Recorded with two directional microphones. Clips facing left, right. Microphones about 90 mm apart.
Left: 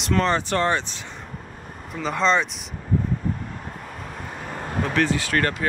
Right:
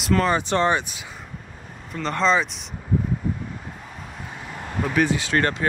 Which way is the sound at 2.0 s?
5° left (ahead or behind).